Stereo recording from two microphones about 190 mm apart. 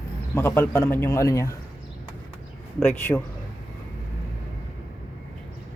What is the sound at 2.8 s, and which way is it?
Speech, 10° left (ahead or behind).